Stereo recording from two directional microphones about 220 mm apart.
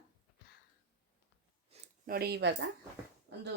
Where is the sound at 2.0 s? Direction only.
45° right (ahead or behind).